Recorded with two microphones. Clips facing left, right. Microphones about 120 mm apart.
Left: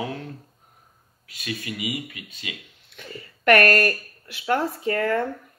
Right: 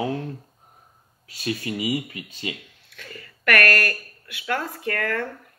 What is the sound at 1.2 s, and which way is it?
Speech, 30° right (ahead or behind).